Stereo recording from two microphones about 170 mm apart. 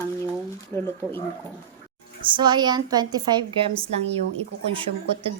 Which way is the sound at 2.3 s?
25° right (ahead or behind).